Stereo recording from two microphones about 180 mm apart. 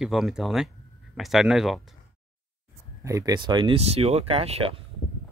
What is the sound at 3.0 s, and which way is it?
Speech, 20° right (ahead or behind).